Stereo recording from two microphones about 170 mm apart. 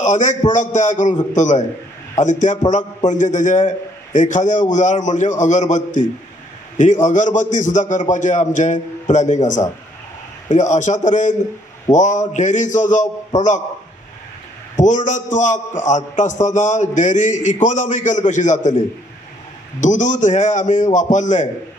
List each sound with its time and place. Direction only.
0.0 s a man's voice: 45° left (ahead or behind)
14.8 s a man's voice: 45° left (ahead or behind)
19.8 s a man's voice: 45° left (ahead or behind)